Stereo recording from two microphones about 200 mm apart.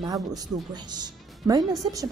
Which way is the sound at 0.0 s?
20° right (ahead or behind).